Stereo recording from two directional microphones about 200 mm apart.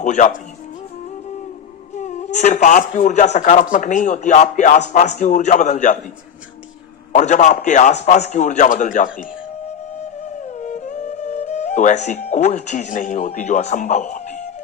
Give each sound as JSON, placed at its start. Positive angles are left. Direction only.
{"t": 0.0, "sound": "speech", "side_deg": 40}
{"t": 2.0, "sound": "speech", "side_deg": 35}
{"t": 7.1, "sound": "speech", "side_deg": 35}
{"t": 10.6, "sound": "music", "side_deg": 40}